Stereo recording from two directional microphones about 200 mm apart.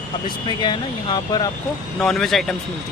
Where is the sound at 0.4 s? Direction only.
25° left (ahead or behind).